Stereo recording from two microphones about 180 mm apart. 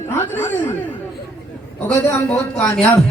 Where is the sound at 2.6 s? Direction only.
5° left (ahead or behind).